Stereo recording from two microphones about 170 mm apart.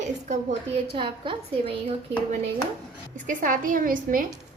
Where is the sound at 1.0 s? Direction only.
30° right (ahead or behind).